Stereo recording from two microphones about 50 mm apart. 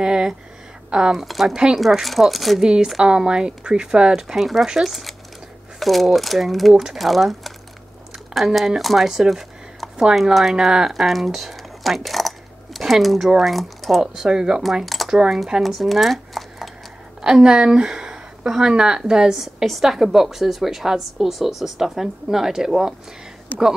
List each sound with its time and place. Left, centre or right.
0.0 s a woman's voice: centre
1.1 s speech: centre
1.5 s a woman's voice: centre
1.8 s speech: centre
2.6 s a woman's voice: centre
8.5 s a woman's voice: centre
10.9 s squish: centre
13.4 s speech: centre
14.1 s a woman's voice: centre
15.6 s a sound: centre
17.2 s a woman's voice: centre